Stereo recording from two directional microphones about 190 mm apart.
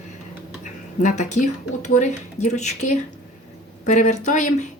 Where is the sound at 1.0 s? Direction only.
40° left (ahead or behind).